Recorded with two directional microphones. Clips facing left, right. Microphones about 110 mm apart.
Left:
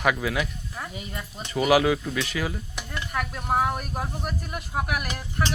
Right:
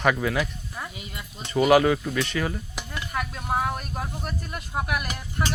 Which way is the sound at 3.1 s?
Centre (ahead or behind).